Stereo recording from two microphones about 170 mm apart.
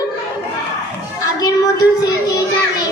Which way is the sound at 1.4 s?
20° left (ahead or behind).